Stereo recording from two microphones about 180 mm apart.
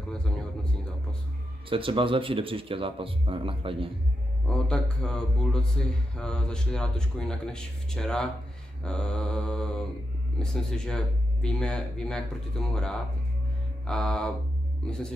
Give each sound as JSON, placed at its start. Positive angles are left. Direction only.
{"t": 1.7, "sound": "speech", "side_deg": -30}
{"t": 4.5, "sound": "speech", "side_deg": 5}